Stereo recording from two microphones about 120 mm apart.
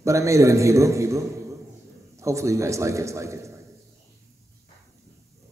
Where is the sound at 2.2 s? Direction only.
25° right (ahead or behind).